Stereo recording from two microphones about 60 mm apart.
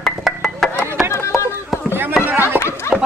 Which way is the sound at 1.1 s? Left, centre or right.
Left.